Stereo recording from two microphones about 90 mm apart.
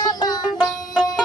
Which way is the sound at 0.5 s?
5° left (ahead or behind).